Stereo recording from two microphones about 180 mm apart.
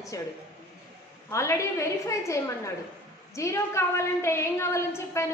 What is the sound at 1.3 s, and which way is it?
A woman's voice, 15° left (ahead or behind).